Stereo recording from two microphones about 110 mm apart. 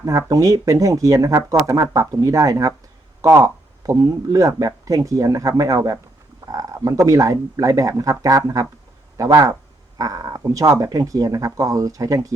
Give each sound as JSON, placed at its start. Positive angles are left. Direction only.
{"t": 0.0, "sound": "speech", "side_deg": -30}
{"t": 9.1, "sound": "speech", "side_deg": -30}